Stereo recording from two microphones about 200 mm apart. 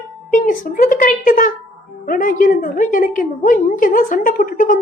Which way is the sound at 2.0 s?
45° left (ahead or behind).